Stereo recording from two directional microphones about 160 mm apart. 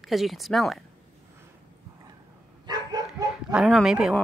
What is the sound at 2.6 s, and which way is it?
Dog, 25° right (ahead or behind).